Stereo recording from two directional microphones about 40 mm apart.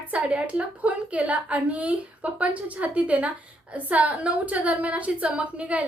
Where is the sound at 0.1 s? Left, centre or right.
Right.